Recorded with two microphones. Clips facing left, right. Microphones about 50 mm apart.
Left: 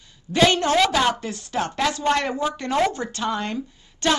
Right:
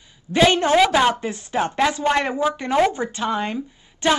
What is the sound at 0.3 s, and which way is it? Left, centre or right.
Speech, centre.